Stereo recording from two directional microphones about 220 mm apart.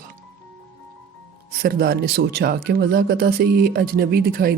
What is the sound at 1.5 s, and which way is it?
Speech, 45° right (ahead or behind).